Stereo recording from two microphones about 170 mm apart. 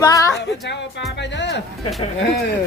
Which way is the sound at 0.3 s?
90° left.